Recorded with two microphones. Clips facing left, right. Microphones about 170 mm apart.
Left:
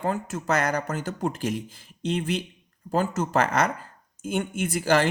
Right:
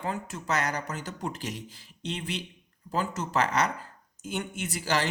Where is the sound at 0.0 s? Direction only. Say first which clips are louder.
Left 6 dB; 50° left (ahead or behind).